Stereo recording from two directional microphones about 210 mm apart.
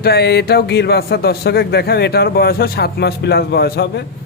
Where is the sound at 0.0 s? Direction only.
50° left (ahead or behind).